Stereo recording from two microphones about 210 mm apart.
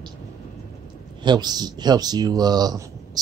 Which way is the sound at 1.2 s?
20° right (ahead or behind).